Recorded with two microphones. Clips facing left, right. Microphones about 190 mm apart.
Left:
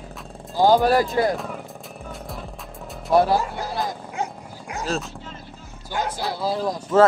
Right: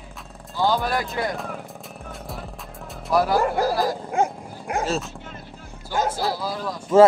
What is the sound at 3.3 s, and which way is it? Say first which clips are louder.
Speech: right 3 dB; 60° right (ahead or behind).